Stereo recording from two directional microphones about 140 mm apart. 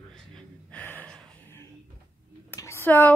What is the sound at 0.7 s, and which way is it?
Gasp, 10° left (ahead or behind).